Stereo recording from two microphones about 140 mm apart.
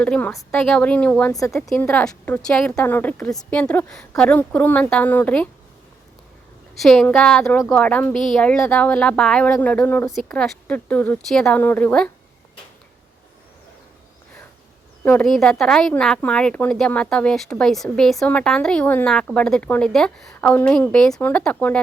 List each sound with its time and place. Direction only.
0.0 s speech: 10° left (ahead or behind)
1.3 s speech: 25° left (ahead or behind)
1.7 s speech: 10° left (ahead or behind)
6.8 s speech: 5° left (ahead or behind)
10.1 s speech: 5° left (ahead or behind)
15.2 s speech: 5° left (ahead or behind)